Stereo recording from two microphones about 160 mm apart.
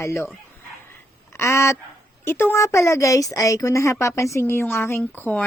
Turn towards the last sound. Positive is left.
turn(degrees=10)  # may be behind; listen again after turning